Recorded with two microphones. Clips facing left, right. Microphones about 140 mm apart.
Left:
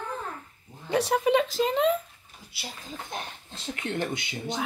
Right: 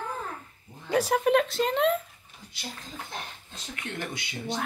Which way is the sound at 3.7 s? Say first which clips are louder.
Left 5 dB; 25° left (ahead or behind).